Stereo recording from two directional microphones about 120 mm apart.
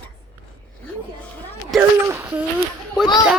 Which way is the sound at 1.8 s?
20° right (ahead or behind).